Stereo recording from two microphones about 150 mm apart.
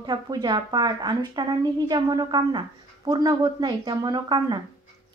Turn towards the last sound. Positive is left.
turn(degrees=-30)  # may be behind; listen again after turning